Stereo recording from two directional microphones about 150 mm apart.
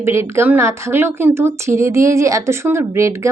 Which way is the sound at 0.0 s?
15° right (ahead or behind).